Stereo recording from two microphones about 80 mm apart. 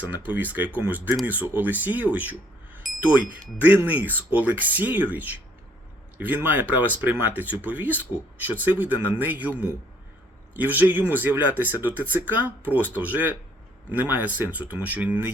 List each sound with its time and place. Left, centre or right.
0.0 s speech: right
2.8 s a sound: centre
3.6 s speech: right